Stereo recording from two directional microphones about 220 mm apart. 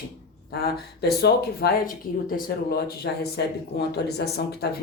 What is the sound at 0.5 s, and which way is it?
Speech, 45° left (ahead or behind).